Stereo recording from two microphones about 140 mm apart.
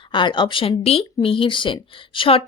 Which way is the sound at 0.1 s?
35° left (ahead or behind).